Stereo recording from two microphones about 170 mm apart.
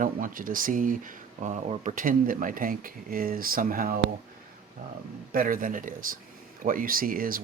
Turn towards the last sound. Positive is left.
turn(degrees=-55)  # may be behind; listen again after turning